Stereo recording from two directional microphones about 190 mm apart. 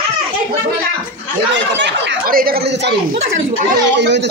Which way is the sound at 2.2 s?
50° right (ahead or behind).